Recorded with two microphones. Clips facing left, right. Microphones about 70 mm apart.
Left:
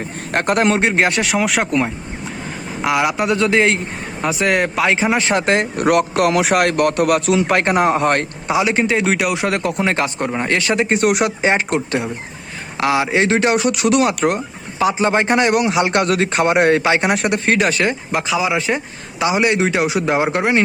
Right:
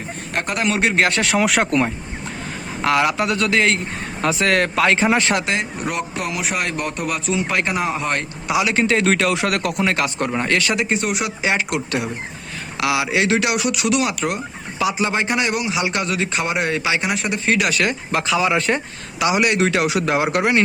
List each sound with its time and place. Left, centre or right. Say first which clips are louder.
0.3 s speech: left 6 dB; left
0.7 s speech: left 2 dB; left
1.3 s speech: even; centre
2.8 s speech: left 1 dB; centre
5.4 s speech: left 6 dB; left
5.7 s speech: left 10 dB; left
7.5 s speech: left 7 dB; left
8.4 s speech: left 1 dB; left
10.2 s speech: left 1 dB; centre
10.5 s speech: left 4 dB; left
10.9 s speech: left 6 dB; left
11.4 s speech: left 1 dB; left
17.6 s speech: left 3 dB; left; by 18.8 s centre
19.2 s speech: left 1 dB; left